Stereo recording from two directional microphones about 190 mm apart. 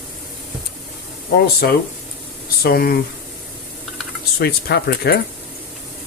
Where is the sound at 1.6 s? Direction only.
55° left (ahead or behind).